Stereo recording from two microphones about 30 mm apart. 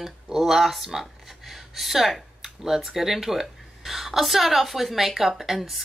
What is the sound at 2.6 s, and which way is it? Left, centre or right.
A woman's voice, centre.